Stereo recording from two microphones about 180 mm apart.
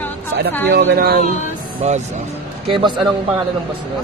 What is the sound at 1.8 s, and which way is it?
Speech, 40° right (ahead or behind).